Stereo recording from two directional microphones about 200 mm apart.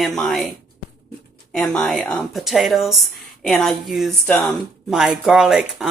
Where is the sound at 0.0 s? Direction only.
Centre (ahead or behind).